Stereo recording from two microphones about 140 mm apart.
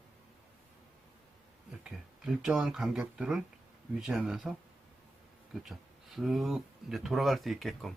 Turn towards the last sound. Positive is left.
turn(degrees=0)  # may be behind; listen again after turning